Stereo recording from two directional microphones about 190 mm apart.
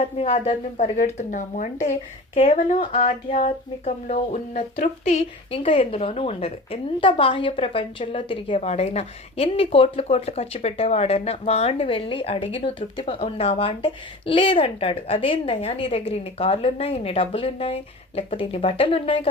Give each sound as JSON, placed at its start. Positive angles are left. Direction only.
{"t": 0.0, "sound": "speech", "side_deg": 30}